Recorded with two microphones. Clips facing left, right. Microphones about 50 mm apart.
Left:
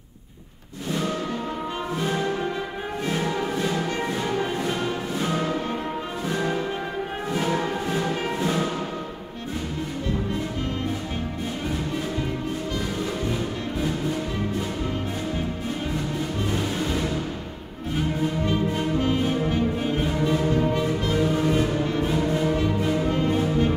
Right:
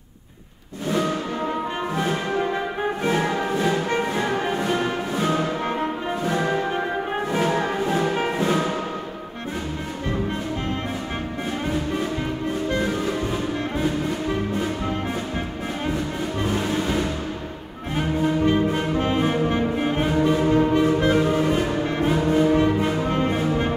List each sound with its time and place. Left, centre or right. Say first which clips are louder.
3.3 s music: right 3 dB; right
8.4 s music: right 2 dB; right
18.4 s music: right 4 dB; right
20.2 s music: right 5 dB; right